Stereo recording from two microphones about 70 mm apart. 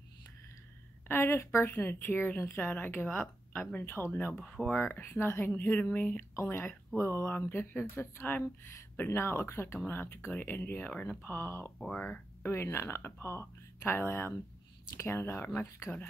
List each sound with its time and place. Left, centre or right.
1.0 s a woman's voice: left
1.7 s a woman's voice: left
3.8 s speech: left
4.4 s speech: centre
4.7 s speech: left
5.6 s a woman's voice: left
6.1 s a woman's voice: left
11.8 s speech: centre
12.4 s speech: left